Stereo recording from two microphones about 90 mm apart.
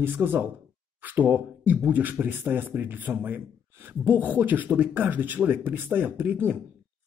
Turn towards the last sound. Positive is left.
turn(degrees=-20)  # may be behind; listen again after turning